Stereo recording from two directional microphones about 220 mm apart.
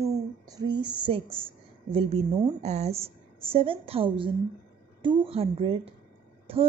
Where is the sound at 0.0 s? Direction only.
15° right (ahead or behind).